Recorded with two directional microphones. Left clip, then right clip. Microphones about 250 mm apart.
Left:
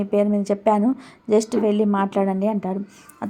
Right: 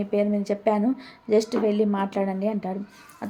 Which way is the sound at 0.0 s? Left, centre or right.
Centre.